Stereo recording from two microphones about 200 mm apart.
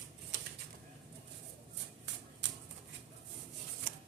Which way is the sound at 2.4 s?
60° right (ahead or behind).